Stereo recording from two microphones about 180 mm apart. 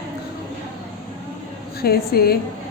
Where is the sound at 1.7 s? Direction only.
60° left (ahead or behind).